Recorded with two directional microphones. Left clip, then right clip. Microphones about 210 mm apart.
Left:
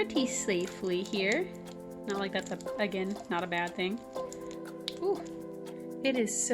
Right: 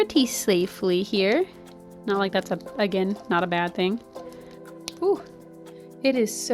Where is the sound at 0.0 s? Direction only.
50° right (ahead or behind).